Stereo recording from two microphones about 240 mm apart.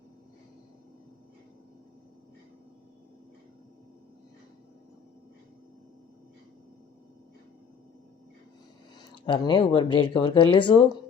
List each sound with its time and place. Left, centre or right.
9.0 s speech: centre